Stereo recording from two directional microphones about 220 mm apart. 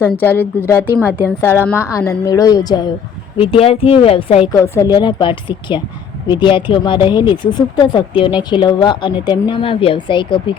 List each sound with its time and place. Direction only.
0.0 s a woman's voice: 10° left (ahead or behind); by 4.4 s 25° left (ahead or behind)
4.5 s speech: 15° left (ahead or behind)